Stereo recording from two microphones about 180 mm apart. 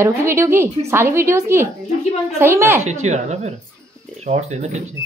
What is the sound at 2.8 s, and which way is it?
Speech, 40° right (ahead or behind).